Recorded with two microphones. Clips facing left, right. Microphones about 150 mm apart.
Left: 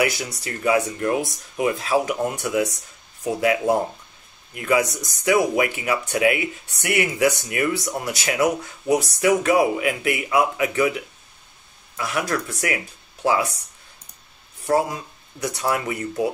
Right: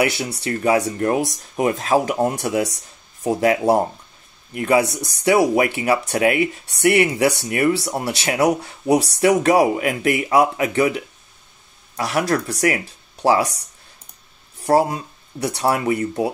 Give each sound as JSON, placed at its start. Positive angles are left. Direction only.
{"t": 0.0, "sound": "speech", "side_deg": -30}
{"t": 12.0, "sound": "speech", "side_deg": -35}
{"t": 14.7, "sound": "speech", "side_deg": -35}